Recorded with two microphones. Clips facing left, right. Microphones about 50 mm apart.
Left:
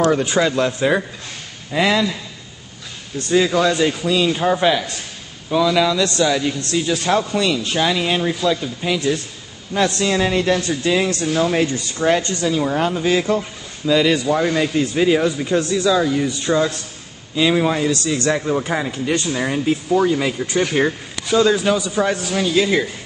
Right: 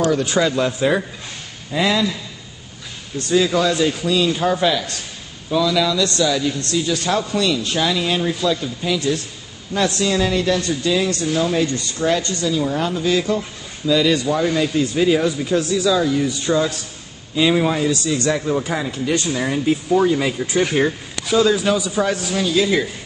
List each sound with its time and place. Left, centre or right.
0.2 s speech: centre
0.6 s speech: centre
1.7 s a man's voice: left
3.3 s a man's voice: centre
18.3 s a man's voice: centre
19.6 s speech: centre